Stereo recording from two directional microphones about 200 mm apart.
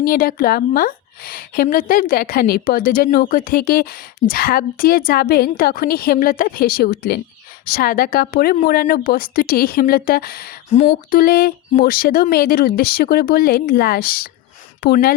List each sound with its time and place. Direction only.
0.0 s a woman's voice: 45° left (ahead or behind)
10.7 s a woman's voice: 40° left (ahead or behind)